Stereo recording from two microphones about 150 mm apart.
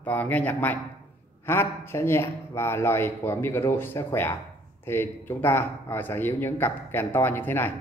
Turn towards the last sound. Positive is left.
turn(degrees=15)  # may be behind; listen again after turning